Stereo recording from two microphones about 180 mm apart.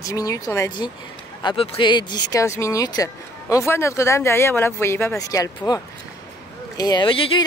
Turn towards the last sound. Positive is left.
turn(degrees=30)  # may be behind; listen again after turning